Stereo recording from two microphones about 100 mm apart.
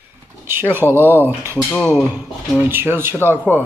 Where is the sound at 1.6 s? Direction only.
10° left (ahead or behind).